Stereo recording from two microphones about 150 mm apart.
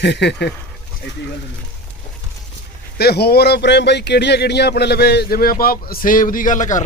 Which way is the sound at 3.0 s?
90° left.